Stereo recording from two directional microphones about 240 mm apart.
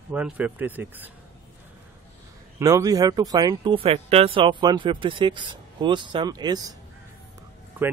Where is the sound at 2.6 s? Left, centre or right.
Centre.